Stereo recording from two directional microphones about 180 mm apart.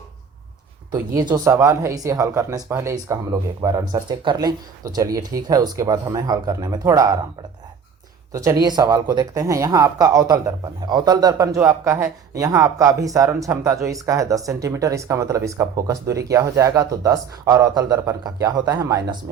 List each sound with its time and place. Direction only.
0.9 s speech: 25° right (ahead or behind)
8.3 s speech: 20° right (ahead or behind)